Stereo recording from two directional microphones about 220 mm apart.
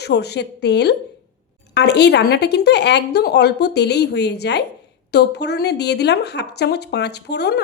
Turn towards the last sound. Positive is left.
turn(degrees=50)  # may be behind; listen again after turning